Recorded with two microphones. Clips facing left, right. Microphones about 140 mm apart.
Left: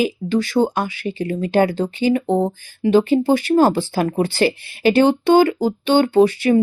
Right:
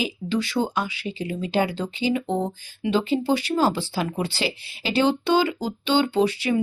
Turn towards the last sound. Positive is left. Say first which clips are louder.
# left 8 dB
turn(degrees=50)  # may be behind; listen again after turning